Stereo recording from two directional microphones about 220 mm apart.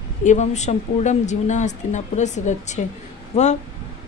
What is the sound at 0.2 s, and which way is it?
A woman's voice, 30° left (ahead or behind).